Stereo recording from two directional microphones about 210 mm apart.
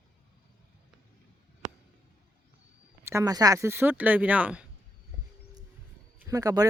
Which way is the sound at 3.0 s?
15° right (ahead or behind).